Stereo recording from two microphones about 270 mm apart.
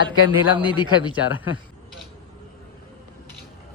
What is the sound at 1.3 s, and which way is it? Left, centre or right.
Speech, left.